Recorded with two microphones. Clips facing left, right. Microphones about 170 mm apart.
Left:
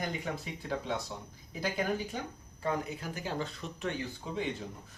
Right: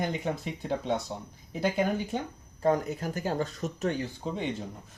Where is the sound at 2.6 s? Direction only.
45° right (ahead or behind).